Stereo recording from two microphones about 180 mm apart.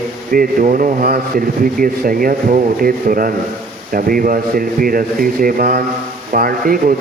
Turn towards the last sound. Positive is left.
turn(degrees=-50)  # may be behind; listen again after turning